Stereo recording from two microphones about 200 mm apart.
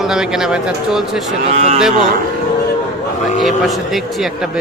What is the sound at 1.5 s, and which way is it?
Speech, 35° right (ahead or behind).